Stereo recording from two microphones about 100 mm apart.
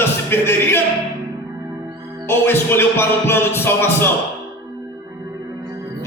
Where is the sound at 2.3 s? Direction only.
25° left (ahead or behind).